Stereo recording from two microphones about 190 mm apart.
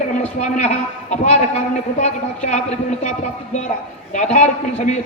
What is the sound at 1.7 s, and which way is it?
Speech, 40° left (ahead or behind).